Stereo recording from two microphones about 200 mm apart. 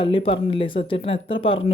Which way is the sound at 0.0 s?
25° left (ahead or behind).